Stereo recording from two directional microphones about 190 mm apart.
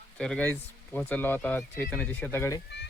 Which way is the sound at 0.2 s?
5° left (ahead or behind).